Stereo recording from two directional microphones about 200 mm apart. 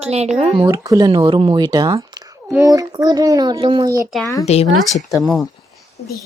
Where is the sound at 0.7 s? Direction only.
15° right (ahead or behind).